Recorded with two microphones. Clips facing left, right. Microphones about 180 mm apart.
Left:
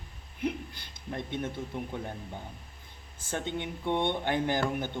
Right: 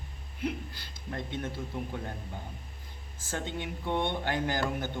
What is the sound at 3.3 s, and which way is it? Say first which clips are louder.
Speech: left 2 dB; 20° left (ahead or behind).